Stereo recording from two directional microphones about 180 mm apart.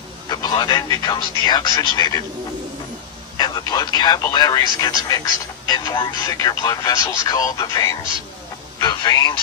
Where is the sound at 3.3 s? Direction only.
20° left (ahead or behind).